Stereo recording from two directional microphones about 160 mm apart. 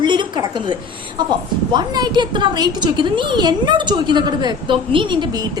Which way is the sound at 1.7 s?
25° right (ahead or behind).